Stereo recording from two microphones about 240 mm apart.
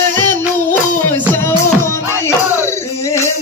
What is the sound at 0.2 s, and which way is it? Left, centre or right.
Music, centre.